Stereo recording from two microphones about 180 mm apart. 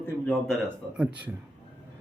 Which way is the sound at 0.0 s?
5° left (ahead or behind).